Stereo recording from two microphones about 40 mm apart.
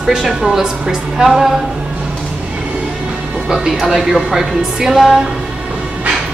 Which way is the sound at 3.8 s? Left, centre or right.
Centre.